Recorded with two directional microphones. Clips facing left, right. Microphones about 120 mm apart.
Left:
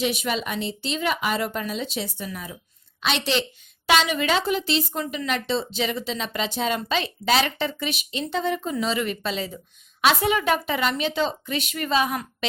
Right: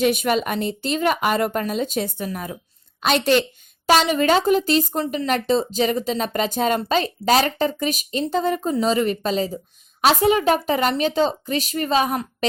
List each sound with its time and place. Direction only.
0.0 s speech: 50° right (ahead or behind)